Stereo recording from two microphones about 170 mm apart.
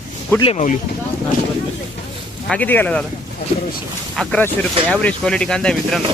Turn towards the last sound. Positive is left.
turn(degrees=5)  # may be behind; listen again after turning